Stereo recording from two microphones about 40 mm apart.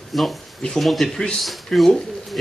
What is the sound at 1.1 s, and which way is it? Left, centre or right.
Speech, centre.